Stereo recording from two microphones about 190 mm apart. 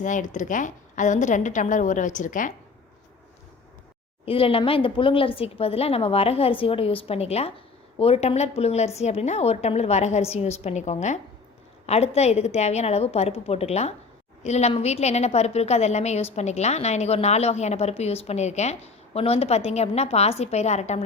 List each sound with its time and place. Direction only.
0.0 s a woman's voice: 40° left (ahead or behind)
4.3 s a woman's voice: 30° left (ahead or behind)